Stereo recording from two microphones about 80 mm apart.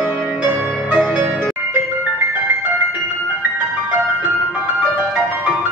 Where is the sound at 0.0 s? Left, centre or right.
Right.